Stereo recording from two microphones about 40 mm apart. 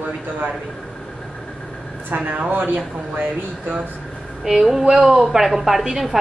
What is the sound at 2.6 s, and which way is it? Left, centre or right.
Speech, right.